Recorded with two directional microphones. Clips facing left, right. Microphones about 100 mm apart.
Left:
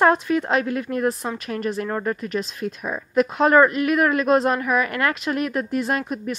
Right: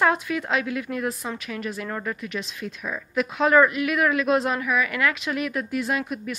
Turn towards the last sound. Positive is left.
turn(degrees=40)  # may be behind; listen again after turning